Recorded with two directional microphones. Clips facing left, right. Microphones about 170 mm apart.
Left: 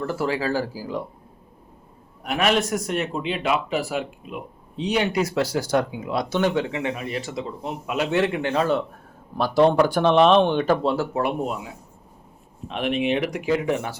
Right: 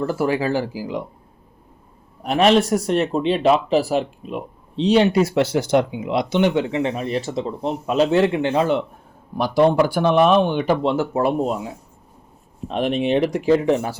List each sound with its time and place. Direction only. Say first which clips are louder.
0.0 s speech: right 4 dB; 25° right (ahead or behind)
2.2 s a man's voice: right 6 dB; 30° right (ahead or behind)
12.6 s a man's voice: right 3 dB; 35° right (ahead or behind)